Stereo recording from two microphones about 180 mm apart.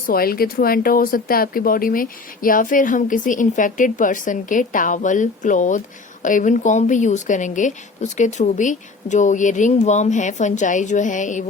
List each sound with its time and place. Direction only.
0.1 s speech: 55° left (ahead or behind)